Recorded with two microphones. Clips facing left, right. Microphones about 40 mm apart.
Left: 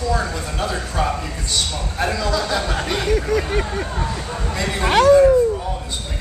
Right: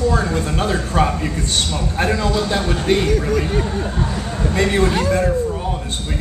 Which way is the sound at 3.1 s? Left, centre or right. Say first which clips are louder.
Right 1 dB; left.